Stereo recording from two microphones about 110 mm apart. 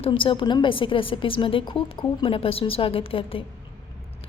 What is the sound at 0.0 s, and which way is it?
A woman's voice, 55° left (ahead or behind).